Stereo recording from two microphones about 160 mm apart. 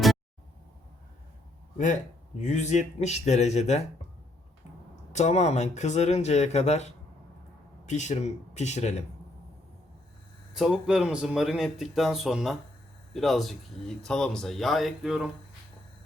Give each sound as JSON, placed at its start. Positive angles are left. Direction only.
{"t": 2.4, "sound": "speech", "side_deg": 45}
{"t": 5.1, "sound": "speech", "side_deg": 45}
{"t": 7.9, "sound": "speech", "side_deg": 45}
{"t": 10.5, "sound": "speech", "side_deg": -5}